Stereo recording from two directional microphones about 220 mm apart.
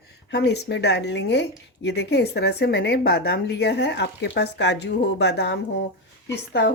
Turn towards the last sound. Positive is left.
turn(degrees=50)  # may be behind; listen again after turning